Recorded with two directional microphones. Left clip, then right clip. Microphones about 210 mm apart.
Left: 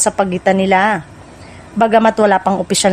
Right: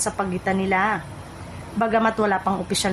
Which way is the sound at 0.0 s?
40° left (ahead or behind).